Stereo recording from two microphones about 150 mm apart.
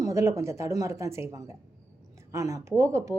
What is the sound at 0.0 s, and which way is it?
A woman's voice, 20° right (ahead or behind).